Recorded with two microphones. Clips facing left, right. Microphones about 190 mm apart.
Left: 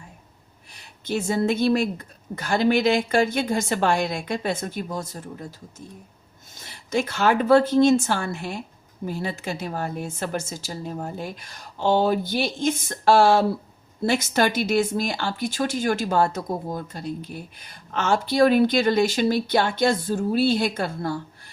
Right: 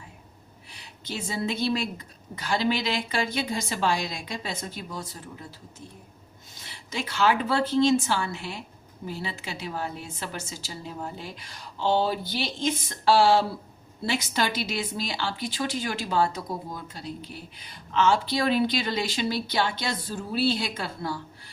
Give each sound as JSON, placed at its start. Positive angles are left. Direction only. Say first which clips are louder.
{"t": 0.7, "sound": "a woman's voice", "louder": "left 9 dB", "side_deg": 50}